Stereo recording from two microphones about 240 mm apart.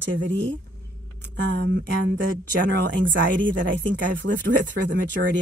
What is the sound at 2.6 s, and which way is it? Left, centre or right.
Speech, right.